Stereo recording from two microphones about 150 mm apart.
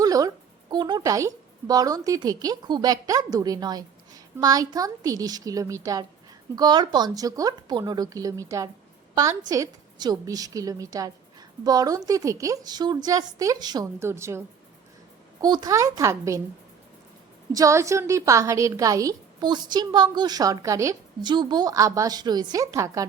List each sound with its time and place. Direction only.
0.0 s a woman's voice: 25° right (ahead or behind)
17.5 s a woman's voice: 20° right (ahead or behind)